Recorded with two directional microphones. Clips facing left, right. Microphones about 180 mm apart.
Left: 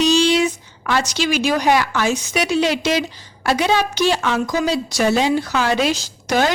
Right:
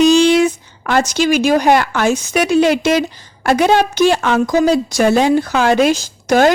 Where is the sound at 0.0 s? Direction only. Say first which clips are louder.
Right 6 dB; 50° right (ahead or behind).